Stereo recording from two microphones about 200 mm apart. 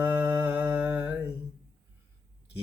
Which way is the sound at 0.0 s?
10° right (ahead or behind).